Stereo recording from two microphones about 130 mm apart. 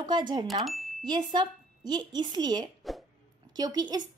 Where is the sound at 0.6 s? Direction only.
Centre (ahead or behind).